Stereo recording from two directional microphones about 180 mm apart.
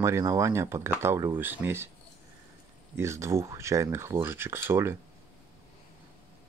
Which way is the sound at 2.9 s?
15° right (ahead or behind).